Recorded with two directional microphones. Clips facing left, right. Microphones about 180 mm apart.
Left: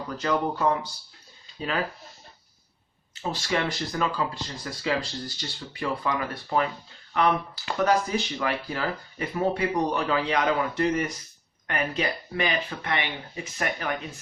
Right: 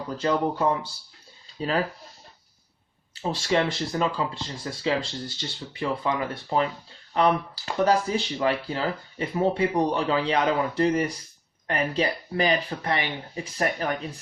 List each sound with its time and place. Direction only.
0.1 s speech: 30° right (ahead or behind)
3.2 s speech: 30° right (ahead or behind)